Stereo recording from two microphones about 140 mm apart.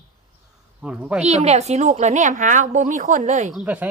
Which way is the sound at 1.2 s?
55° right (ahead or behind).